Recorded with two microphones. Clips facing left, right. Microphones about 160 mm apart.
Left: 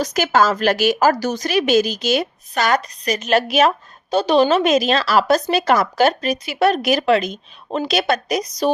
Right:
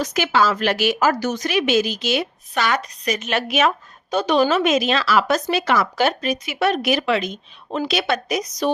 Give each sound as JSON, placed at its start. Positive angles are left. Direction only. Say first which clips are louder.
{"t": 0.0, "sound": "speech", "louder": "left 2 dB", "side_deg": 40}